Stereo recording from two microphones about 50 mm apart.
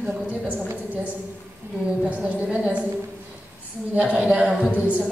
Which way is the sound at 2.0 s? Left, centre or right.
Right.